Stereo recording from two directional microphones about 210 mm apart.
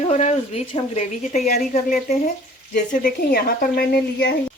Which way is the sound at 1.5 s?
45° left (ahead or behind).